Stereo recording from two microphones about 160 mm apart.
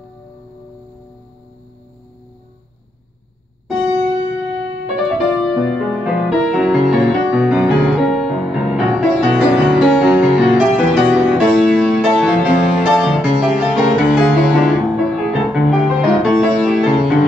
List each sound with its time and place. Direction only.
3.6 s music: 5° right (ahead or behind)
14.6 s music: centre (ahead or behind)